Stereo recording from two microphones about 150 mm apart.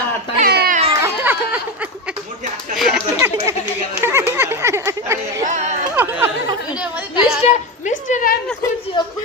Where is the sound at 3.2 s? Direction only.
20° right (ahead or behind).